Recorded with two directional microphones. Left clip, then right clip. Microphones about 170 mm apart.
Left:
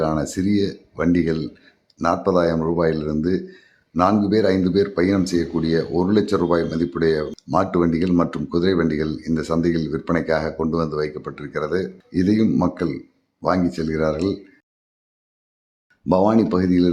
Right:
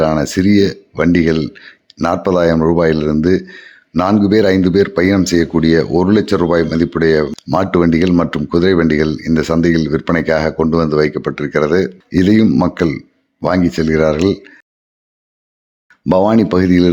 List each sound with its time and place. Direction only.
0.0 s speech: 30° right (ahead or behind)
16.0 s speech: 30° right (ahead or behind)